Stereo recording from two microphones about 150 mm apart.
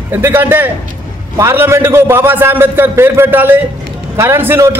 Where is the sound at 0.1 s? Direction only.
15° right (ahead or behind).